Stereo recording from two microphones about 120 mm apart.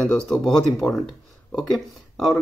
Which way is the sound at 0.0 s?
Centre (ahead or behind).